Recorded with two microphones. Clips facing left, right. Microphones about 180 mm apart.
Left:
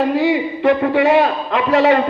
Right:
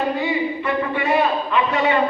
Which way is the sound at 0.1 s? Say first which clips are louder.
Left 5 dB; 80° left.